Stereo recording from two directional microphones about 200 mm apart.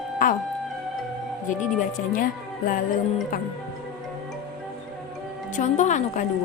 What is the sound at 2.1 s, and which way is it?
A woman's voice, 45° left (ahead or behind).